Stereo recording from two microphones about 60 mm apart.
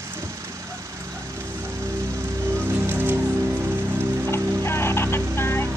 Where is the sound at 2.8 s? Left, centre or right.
Right.